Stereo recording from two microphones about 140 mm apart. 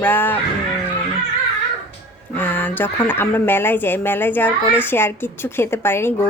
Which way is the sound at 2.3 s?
15° left (ahead or behind).